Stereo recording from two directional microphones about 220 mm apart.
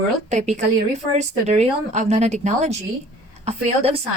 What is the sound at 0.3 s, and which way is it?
Speech, 30° right (ahead or behind).